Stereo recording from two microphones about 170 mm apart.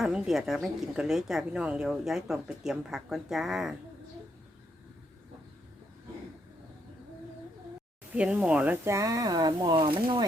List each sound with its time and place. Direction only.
0.0 s a woman's voice: 5° right (ahead or behind)
8.1 s speech: 5° right (ahead or behind); by 10.2 s 30° right (ahead or behind)